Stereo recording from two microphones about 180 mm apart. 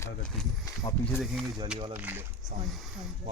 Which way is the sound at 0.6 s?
20° left (ahead or behind).